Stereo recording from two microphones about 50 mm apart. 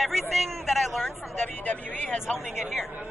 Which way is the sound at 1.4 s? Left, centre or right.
Left.